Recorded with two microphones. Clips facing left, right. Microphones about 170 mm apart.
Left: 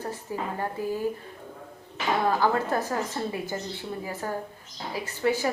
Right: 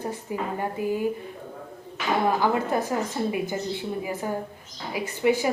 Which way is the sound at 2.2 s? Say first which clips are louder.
Right 1 dB; 15° right (ahead or behind).